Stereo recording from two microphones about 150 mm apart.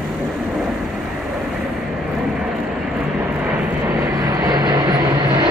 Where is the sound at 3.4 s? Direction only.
20° right (ahead or behind).